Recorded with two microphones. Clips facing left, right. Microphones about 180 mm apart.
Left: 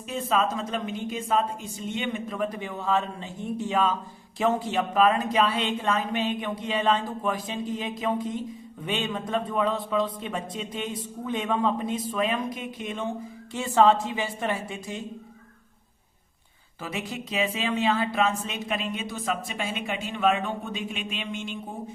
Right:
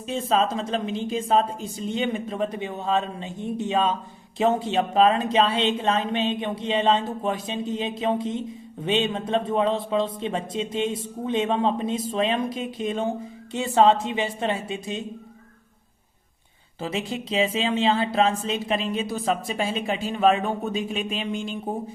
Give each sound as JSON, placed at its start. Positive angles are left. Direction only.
{"t": 0.1, "sound": "speech", "side_deg": -30}
{"t": 16.8, "sound": "speech", "side_deg": -25}